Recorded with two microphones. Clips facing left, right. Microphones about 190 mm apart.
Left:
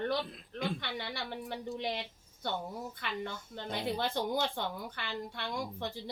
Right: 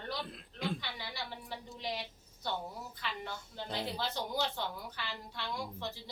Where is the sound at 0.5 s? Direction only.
60° left (ahead or behind).